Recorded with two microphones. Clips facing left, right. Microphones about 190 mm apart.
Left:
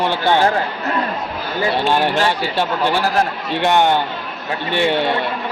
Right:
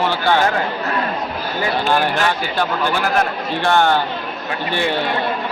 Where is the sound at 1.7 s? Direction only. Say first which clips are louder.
Left 1 dB; 25° left (ahead or behind).